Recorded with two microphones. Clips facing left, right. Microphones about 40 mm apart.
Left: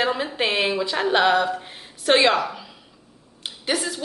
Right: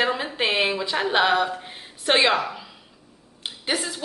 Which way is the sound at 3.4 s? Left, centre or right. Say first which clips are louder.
Left 2 dB; centre.